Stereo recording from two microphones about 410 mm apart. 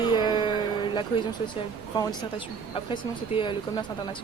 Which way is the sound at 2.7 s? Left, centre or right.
Centre.